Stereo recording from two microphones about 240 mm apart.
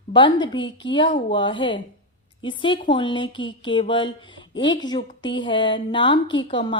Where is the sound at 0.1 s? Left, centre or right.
Centre.